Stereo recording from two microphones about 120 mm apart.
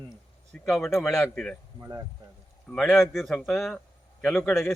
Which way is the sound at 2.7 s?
Centre (ahead or behind).